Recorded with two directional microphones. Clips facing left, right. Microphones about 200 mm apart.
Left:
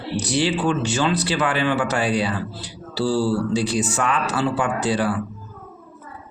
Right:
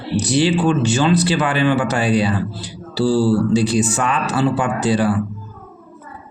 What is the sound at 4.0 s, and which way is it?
Speech, 20° right (ahead or behind).